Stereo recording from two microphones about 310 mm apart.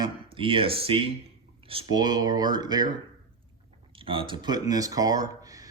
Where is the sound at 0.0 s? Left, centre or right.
Centre.